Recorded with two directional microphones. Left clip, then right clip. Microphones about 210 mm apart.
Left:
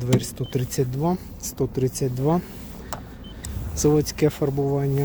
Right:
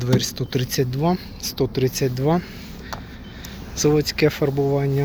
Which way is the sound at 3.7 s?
20° left (ahead or behind).